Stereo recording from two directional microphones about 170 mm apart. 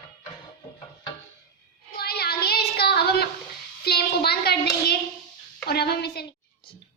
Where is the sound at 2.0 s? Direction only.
65° left (ahead or behind).